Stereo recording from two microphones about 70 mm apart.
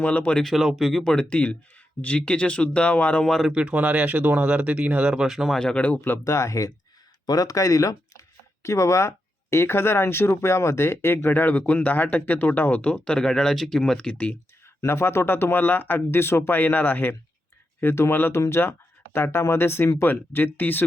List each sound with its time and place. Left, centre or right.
0.0 s speech: centre
0.4 s speech: centre
3.2 s speech: centre
3.5 s speech: centre
5.5 s speech: centre
6.2 s speech: left
7.3 s speech: left; by 14.3 s centre
14.8 s speech: left